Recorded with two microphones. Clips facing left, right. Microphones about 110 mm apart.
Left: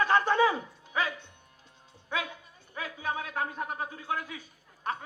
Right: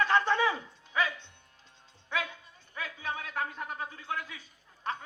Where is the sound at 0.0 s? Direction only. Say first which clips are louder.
Left 2 dB; 40° left (ahead or behind).